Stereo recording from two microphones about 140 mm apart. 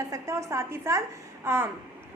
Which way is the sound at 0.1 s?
20° right (ahead or behind).